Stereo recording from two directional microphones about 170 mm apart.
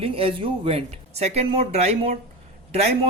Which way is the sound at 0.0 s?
35° right (ahead or behind).